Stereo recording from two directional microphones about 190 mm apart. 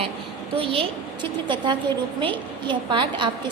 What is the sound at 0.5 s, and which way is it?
A woman's voice, 30° right (ahead or behind).